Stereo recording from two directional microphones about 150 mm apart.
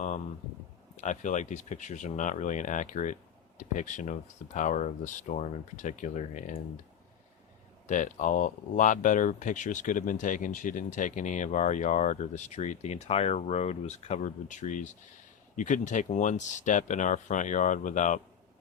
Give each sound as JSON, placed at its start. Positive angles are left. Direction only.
{"t": 0.9, "sound": "speech", "side_deg": 55}
{"t": 7.9, "sound": "speech", "side_deg": 55}